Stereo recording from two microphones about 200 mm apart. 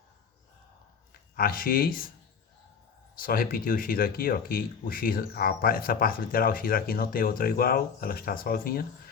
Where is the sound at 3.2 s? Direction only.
45° left (ahead or behind).